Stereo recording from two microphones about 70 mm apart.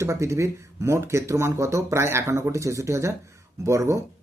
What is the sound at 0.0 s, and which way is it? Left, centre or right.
Speech, right.